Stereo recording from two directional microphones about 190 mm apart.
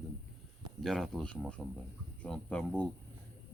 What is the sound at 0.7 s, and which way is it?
Speech, centre (ahead or behind).